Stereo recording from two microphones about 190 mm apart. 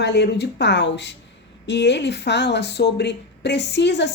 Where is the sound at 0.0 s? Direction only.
65° left (ahead or behind).